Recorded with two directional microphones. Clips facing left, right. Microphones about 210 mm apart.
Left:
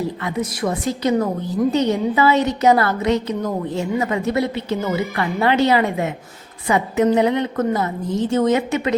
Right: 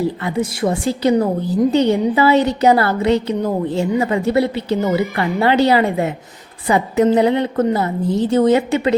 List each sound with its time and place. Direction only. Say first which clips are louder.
0.2 s a woman's voice: right 3 dB; 30° right (ahead or behind)